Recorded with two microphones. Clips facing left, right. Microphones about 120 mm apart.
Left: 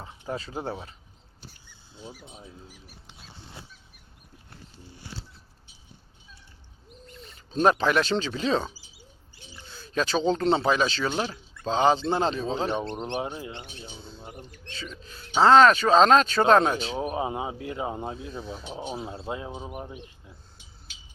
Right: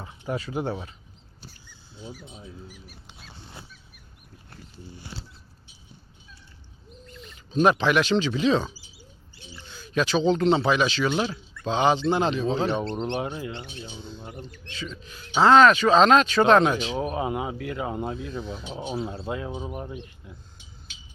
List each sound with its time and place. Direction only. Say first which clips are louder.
0.0 s speech: right 3 dB; 30° left (ahead or behind)
2.0 s speech: right 2 dB; 15° left (ahead or behind)
7.2 s speech: right 2 dB; 35° left (ahead or behind)
9.7 s speech: right 2 dB; 35° left (ahead or behind)
12.6 s speech: right 3 dB; 15° left (ahead or behind)
13.9 s speech: right 4 dB; centre (ahead or behind)
14.3 s speech: right 3 dB; 15° left (ahead or behind)
15.0 s speech: even; 35° left (ahead or behind)
17.0 s speech: right 1 dB; 20° left (ahead or behind)
18.3 s speech: right 3 dB; 10° left (ahead or behind)
18.9 s speech: right 5 dB; 20° left (ahead or behind)
19.5 s speech: right 3 dB; 5° left (ahead or behind)